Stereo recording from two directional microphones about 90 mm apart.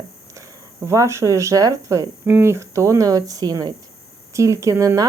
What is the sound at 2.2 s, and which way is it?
Speech, 25° right (ahead or behind).